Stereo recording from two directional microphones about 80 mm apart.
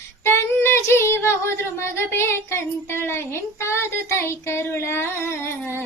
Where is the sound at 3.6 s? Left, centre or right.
Left.